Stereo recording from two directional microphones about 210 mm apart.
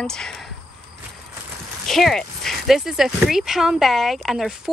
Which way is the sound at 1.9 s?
Centre (ahead or behind).